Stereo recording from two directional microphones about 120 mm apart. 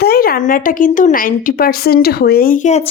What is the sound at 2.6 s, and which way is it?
Speech, 70° left (ahead or behind).